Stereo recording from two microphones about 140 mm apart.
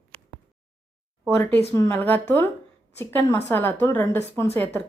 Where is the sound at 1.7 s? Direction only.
20° left (ahead or behind).